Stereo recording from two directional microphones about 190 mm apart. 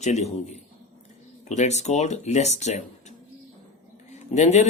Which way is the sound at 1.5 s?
35° left (ahead or behind).